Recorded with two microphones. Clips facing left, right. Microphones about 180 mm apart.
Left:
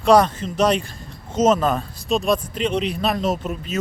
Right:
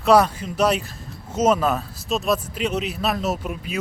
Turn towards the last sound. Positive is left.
turn(degrees=-10)  # may be behind; listen again after turning